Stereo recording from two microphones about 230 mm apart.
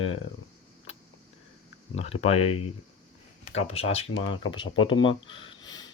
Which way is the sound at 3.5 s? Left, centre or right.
Left.